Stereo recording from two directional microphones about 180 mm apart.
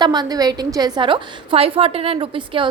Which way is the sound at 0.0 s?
25° right (ahead or behind).